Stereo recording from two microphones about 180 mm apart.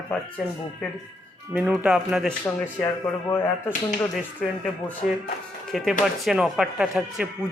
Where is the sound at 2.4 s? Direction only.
15° left (ahead or behind).